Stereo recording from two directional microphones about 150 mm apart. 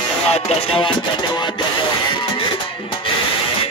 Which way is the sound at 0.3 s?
40° left (ahead or behind).